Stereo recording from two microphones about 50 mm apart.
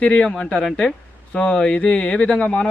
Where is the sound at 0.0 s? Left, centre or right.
Left.